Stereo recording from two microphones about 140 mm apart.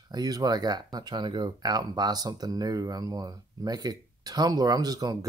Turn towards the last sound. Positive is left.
turn(degrees=-30)  # may be behind; listen again after turning